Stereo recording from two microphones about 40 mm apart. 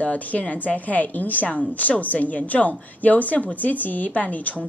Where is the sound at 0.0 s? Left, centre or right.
Left.